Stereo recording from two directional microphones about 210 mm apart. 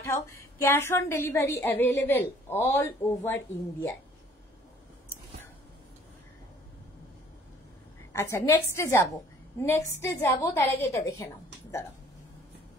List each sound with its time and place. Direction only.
0.0 s a woman's voice: 15° left (ahead or behind)
8.1 s a woman's voice: 15° left (ahead or behind)